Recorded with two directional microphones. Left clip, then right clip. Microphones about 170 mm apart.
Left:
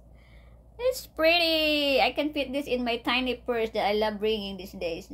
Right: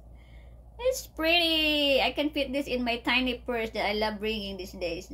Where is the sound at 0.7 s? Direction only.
35° left (ahead or behind).